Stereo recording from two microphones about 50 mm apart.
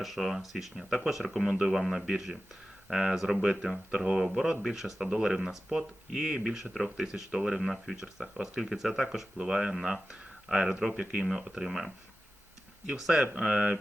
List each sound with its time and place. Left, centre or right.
0.0 s speech: centre
3.4 s speech: centre
8.7 s speech: centre
13.0 s speech: centre